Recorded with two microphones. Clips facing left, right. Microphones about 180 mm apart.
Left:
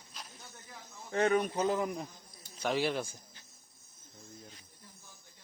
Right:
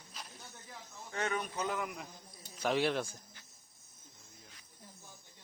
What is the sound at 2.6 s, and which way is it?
Speech, centre (ahead or behind).